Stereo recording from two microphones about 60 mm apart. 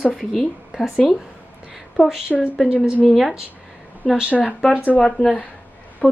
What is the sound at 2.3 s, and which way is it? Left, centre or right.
Speech, centre.